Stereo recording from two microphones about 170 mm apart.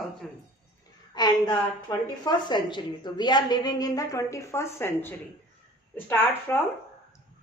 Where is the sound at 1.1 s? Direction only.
25° left (ahead or behind).